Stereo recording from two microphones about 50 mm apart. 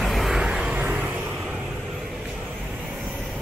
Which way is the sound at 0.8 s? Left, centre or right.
Right.